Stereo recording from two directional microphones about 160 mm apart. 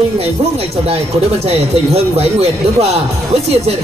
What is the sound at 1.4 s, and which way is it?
Speech, 40° right (ahead or behind).